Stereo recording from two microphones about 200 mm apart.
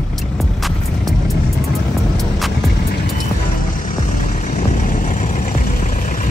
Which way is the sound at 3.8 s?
40° left (ahead or behind).